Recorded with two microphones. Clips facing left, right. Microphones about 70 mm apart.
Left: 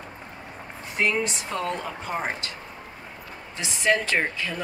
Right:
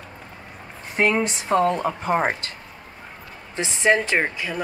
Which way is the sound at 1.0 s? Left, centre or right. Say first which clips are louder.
Right 4 dB; right.